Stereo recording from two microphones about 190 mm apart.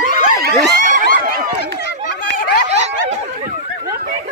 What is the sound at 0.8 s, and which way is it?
Snicker, 45° right (ahead or behind).